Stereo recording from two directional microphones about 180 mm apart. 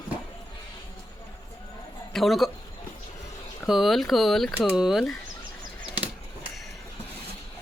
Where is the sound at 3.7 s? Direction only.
Centre (ahead or behind).